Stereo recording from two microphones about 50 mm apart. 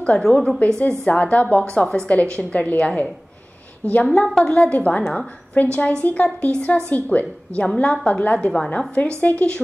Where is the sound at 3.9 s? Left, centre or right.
Left.